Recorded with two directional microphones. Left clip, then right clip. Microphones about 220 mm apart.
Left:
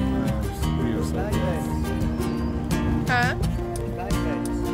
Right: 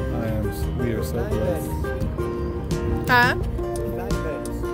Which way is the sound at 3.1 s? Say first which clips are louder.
Right 6 dB; 45° right (ahead or behind).